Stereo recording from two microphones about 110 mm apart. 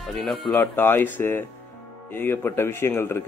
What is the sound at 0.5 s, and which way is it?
Speech, 20° left (ahead or behind).